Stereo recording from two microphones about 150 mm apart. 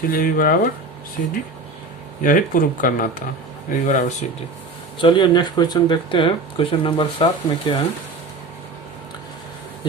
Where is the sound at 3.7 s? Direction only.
55° left (ahead or behind).